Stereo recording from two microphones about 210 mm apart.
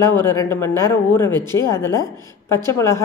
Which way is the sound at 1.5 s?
15° left (ahead or behind).